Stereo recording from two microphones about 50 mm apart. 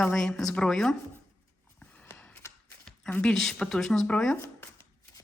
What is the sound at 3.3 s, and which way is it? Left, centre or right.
Speech, centre.